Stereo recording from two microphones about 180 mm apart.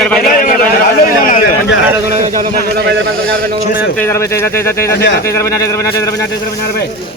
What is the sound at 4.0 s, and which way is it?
Speech, 15° left (ahead or behind).